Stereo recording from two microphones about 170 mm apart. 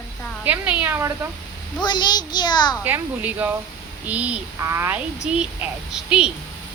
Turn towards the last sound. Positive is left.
turn(degrees=-5)  # may be behind; listen again after turning